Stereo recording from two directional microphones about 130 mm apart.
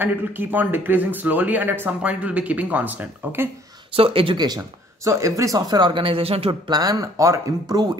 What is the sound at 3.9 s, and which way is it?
Speech, 45° right (ahead or behind).